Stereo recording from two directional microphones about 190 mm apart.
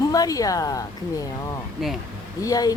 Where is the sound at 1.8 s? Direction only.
Centre (ahead or behind).